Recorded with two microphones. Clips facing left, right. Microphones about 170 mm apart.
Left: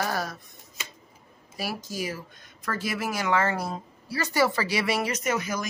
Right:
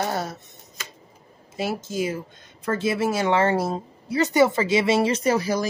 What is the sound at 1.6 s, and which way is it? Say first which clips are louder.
Speech: right 6 dB; 25° right (ahead or behind).